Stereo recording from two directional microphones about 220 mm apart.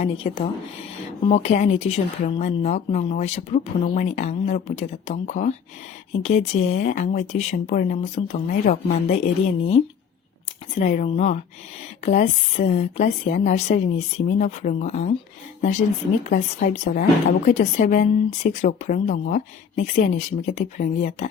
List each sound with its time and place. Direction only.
0.0 s speech: 25° left (ahead or behind); by 9.1 s 40° left (ahead or behind)
10.8 s speech: 30° left (ahead or behind)
16.2 s speech: 35° left (ahead or behind)